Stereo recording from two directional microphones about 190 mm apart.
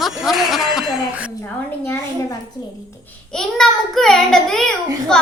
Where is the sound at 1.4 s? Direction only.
15° left (ahead or behind).